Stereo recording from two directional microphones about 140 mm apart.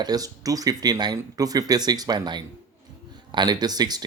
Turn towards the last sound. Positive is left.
turn(degrees=-30)  # may be behind; listen again after turning